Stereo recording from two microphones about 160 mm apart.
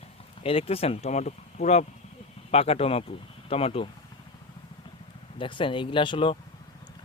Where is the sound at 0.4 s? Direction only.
35° left (ahead or behind).